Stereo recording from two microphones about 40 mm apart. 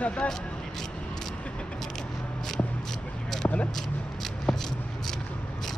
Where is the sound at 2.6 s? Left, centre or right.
Left.